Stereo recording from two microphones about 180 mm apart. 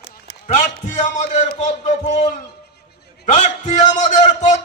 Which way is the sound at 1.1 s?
45° left (ahead or behind).